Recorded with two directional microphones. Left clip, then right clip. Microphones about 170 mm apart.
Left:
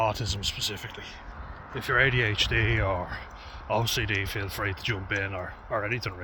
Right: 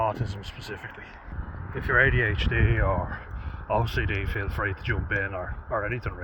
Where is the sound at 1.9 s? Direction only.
15° left (ahead or behind).